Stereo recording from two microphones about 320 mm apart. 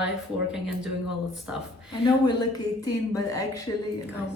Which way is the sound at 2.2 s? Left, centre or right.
Centre.